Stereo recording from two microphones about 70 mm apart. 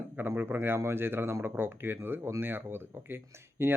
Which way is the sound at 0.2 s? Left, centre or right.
Right.